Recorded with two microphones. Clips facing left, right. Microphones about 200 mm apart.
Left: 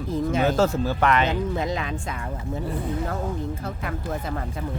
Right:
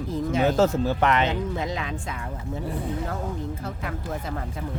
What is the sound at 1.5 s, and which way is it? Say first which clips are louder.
Speech: left 2 dB; 50° left (ahead or behind).